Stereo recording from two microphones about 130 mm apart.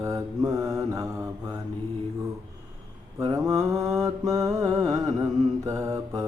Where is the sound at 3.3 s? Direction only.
30° right (ahead or behind).